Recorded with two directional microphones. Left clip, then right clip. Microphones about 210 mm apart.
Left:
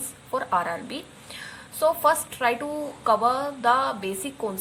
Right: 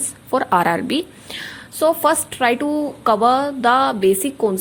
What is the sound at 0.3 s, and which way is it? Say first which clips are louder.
A woman's voice: right 9 dB; 35° right (ahead or behind).